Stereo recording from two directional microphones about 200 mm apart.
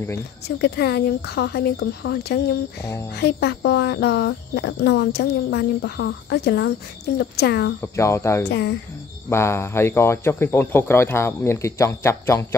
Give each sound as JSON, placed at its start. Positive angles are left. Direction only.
{"t": 0.6, "sound": "speech", "side_deg": 55}
{"t": 7.8, "sound": "speech", "side_deg": 15}
{"t": 8.5, "sound": "speech", "side_deg": 55}
{"t": 9.3, "sound": "speech", "side_deg": 15}